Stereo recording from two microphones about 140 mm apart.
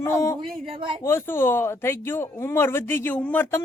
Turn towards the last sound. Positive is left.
turn(degrees=15)  # may be behind; listen again after turning